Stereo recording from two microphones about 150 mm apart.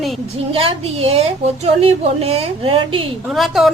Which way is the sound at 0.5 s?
40° right (ahead or behind).